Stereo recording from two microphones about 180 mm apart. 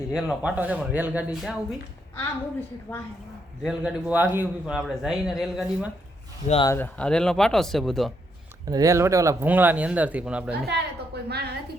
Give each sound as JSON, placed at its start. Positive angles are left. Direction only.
{"t": 0.1, "sound": "speech", "side_deg": -5}
{"t": 2.1, "sound": "a woman's voice", "side_deg": 10}
{"t": 3.6, "sound": "a man's voice", "side_deg": -5}
{"t": 6.7, "sound": "a man's voice", "side_deg": 10}
{"t": 8.7, "sound": "speech", "side_deg": -20}
{"t": 10.7, "sound": "a sound", "side_deg": -65}